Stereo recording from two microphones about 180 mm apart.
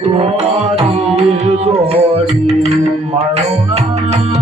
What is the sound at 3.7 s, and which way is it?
Music, 35° right (ahead or behind).